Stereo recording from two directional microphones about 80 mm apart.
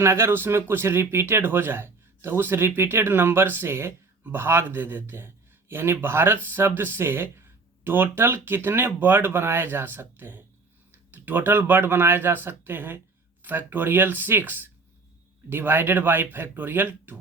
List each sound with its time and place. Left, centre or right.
0.0 s a man's voice: right